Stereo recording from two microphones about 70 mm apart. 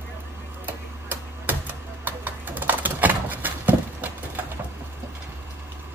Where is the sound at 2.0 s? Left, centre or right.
Right.